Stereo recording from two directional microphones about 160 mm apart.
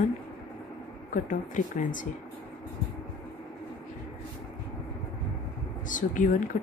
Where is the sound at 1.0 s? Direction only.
55° left (ahead or behind).